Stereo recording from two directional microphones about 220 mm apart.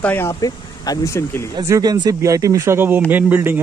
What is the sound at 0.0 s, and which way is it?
Speech, 10° left (ahead or behind).